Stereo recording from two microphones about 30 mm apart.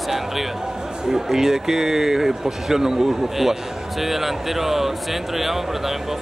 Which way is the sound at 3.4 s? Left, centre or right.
Centre.